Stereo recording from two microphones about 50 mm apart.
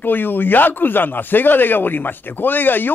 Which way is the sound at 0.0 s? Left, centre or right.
Left.